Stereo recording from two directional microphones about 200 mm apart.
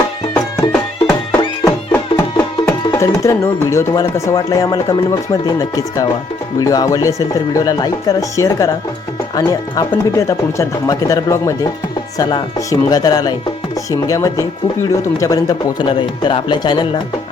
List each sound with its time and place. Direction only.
0.3 s music: 15° left (ahead or behind)
2.6 s speech: 15° left (ahead or behind)